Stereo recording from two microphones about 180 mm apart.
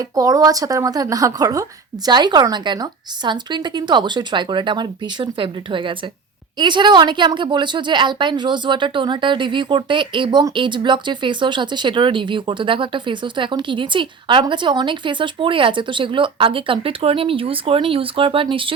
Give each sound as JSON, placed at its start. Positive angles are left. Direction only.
{"t": 0.0, "sound": "a woman's voice", "side_deg": -20}